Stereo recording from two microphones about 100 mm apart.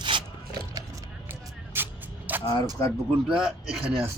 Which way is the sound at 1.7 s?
20° right (ahead or behind).